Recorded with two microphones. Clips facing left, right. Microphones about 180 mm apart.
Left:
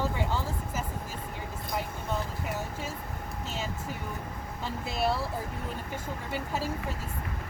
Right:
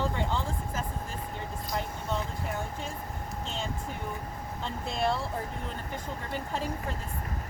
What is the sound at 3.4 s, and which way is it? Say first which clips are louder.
Vehicle: left 1 dB; 5° left (ahead or behind).